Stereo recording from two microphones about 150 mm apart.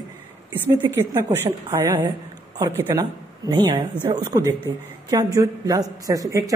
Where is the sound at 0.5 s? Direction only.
15° right (ahead or behind).